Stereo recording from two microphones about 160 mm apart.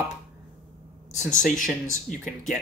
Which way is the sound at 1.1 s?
50° left (ahead or behind).